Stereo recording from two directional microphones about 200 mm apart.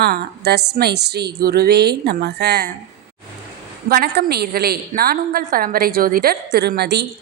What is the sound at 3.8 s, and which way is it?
A woman's voice, 50° right (ahead or behind).